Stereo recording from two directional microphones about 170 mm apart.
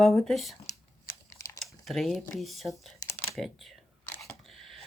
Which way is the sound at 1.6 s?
Centre (ahead or behind).